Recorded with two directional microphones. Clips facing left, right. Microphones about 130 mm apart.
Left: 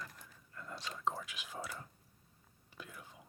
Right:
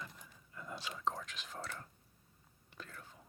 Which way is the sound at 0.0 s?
Centre (ahead or behind).